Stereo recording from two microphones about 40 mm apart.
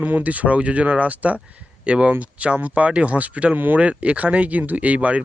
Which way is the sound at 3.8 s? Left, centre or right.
Right.